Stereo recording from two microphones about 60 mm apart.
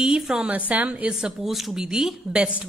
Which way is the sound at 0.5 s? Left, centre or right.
Right.